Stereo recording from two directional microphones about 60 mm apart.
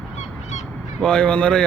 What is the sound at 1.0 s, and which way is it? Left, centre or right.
Speech, centre.